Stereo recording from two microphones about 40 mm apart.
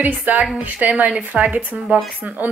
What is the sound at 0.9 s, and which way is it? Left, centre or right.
Speech, right.